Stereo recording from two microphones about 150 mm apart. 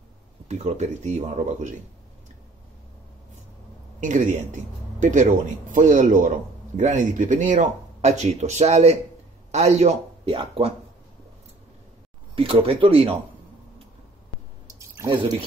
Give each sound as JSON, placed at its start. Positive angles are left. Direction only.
{"t": 0.5, "sound": "speech", "side_deg": -50}
{"t": 4.0, "sound": "a man's voice", "side_deg": -55}
{"t": 12.4, "sound": "speech", "side_deg": -40}
{"t": 15.0, "sound": "speech", "side_deg": -35}